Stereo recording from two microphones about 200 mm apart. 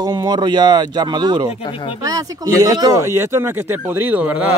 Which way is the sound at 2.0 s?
20° right (ahead or behind).